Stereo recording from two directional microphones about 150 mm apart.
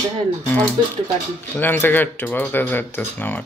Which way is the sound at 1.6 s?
10° left (ahead or behind).